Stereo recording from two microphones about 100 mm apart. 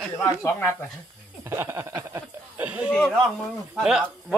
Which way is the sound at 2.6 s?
15° right (ahead or behind).